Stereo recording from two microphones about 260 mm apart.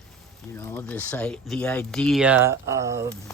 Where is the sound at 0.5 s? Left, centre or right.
Centre.